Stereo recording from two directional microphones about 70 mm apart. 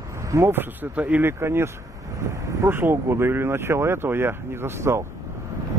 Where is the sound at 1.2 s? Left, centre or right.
Right.